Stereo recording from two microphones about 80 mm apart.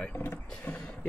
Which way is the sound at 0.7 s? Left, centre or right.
Centre.